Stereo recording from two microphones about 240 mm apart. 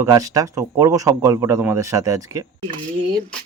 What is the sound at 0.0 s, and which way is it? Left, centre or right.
Speech, centre.